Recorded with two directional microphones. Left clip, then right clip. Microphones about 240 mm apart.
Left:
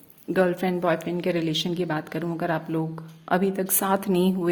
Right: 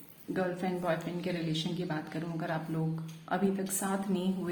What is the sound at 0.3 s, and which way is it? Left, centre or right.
A woman's voice, left.